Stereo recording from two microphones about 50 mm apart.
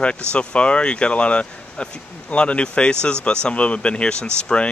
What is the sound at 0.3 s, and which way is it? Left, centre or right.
Speech, left.